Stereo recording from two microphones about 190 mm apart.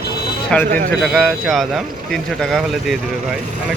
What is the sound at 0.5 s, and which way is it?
Speech, 5° left (ahead or behind).